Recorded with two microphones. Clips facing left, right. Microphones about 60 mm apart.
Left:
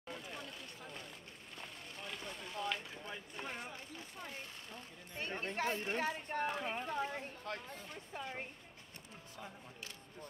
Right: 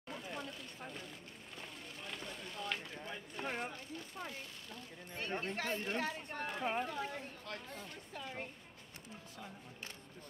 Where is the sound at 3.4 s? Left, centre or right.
Right.